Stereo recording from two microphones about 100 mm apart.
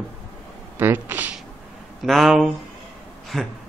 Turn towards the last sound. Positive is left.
turn(degrees=0)  # may be behind; listen again after turning